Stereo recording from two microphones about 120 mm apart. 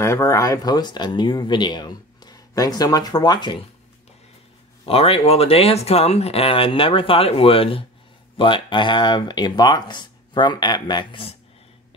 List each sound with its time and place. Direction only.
0.0 s speech: 25° left (ahead or behind)
4.8 s speech: 55° left (ahead or behind)